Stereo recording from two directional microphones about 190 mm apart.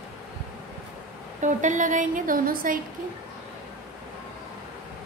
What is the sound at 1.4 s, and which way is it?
A woman's voice, 40° right (ahead or behind).